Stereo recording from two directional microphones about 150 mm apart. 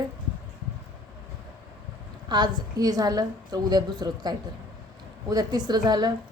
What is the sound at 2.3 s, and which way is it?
A woman's voice, 25° right (ahead or behind).